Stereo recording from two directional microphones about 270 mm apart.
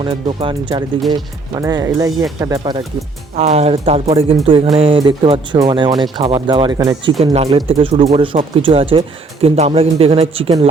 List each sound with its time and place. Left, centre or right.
0.0 s speech: centre